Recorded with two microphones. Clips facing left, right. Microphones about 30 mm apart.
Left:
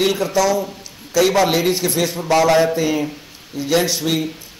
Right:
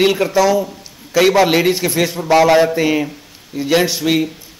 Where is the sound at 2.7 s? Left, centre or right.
Right.